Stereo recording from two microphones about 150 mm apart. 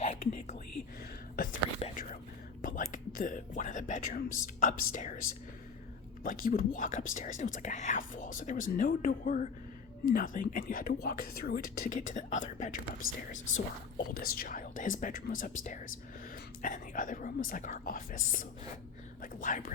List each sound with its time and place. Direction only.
0.0 s whispering: 50° left (ahead or behind)
1.4 s whispering: 70° left (ahead or behind)
1.8 s whispering: 45° left (ahead or behind)
2.6 s whispering: 60° left (ahead or behind)
4.6 s speech: 65° left (ahead or behind)